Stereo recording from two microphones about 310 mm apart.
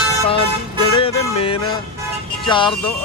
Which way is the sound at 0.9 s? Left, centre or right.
Centre.